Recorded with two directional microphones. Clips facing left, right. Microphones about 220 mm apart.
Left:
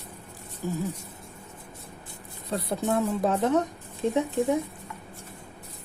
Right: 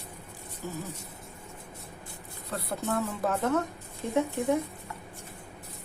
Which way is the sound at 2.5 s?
20° left (ahead or behind).